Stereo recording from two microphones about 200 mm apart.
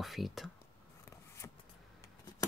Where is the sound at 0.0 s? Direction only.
Centre (ahead or behind).